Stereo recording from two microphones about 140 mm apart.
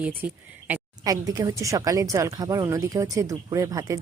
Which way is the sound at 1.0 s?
25° right (ahead or behind).